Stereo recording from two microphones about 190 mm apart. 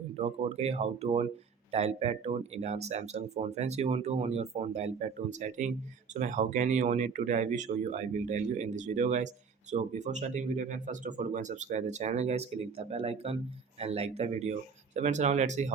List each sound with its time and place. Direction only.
0.2 s speech: 35° right (ahead or behind)